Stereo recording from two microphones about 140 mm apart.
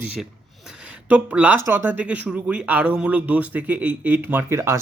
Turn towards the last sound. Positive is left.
turn(degrees=-20)  # may be behind; listen again after turning